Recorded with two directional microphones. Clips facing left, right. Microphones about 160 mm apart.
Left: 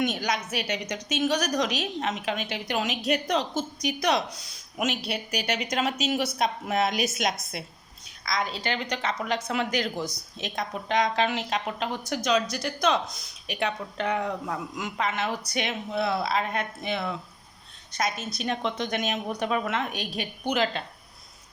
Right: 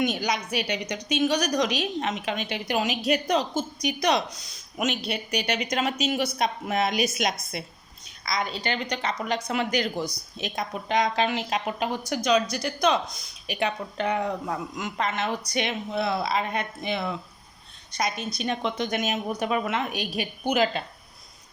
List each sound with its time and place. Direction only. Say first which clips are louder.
0.0 s a woman's voice: right 1 dB; centre (ahead or behind)